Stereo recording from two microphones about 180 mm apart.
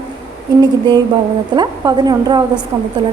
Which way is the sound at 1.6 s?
20° right (ahead or behind).